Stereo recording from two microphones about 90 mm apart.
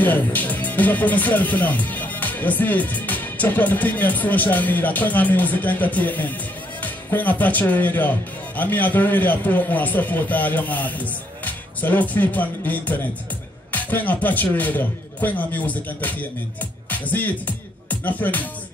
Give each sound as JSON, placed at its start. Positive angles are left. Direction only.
{"t": 0.0, "sound": "speech", "side_deg": 20}
{"t": 17.8, "sound": "music", "side_deg": 20}